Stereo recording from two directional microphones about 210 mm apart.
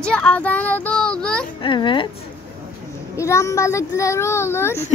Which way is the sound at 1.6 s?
25° left (ahead or behind).